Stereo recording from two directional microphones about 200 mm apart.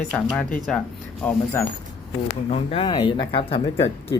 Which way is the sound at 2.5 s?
30° left (ahead or behind).